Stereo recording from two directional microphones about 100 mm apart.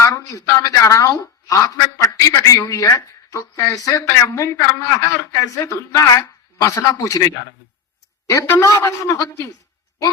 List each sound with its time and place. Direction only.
0.0 s a woman's voice: 35° left (ahead or behind)